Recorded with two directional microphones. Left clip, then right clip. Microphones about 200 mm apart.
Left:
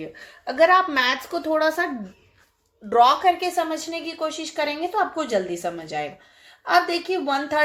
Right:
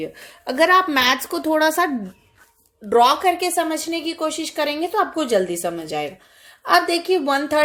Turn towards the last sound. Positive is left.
turn(degrees=-50)  # may be behind; listen again after turning